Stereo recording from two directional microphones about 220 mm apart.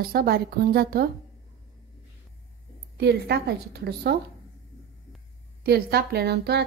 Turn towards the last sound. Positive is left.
turn(degrees=-50)  # may be behind; listen again after turning